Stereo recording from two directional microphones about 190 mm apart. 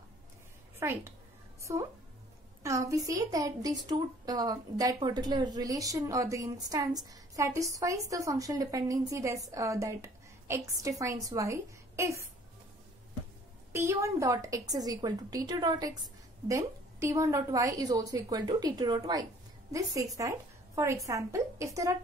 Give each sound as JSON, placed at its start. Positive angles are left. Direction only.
{"t": 0.7, "sound": "a woman's voice", "side_deg": -15}
{"t": 13.7, "sound": "a woman's voice", "side_deg": -15}